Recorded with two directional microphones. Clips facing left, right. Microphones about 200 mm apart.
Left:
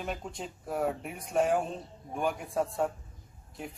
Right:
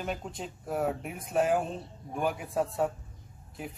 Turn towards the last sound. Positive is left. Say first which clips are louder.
# right 1 dB
turn(degrees=-5)  # may be behind; listen again after turning